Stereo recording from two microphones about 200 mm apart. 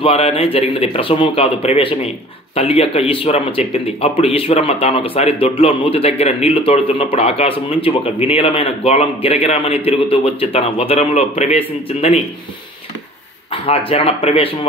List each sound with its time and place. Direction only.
0.0 s speech: 30° left (ahead or behind)
13.5 s speech: 30° left (ahead or behind)